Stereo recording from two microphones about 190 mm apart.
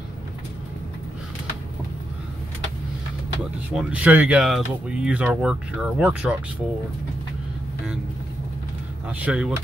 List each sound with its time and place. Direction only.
3.7 s speech: 5° right (ahead or behind)
9.1 s speech: 5° right (ahead or behind)